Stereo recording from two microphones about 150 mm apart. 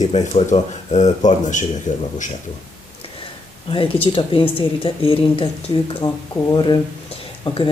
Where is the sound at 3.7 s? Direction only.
35° left (ahead or behind).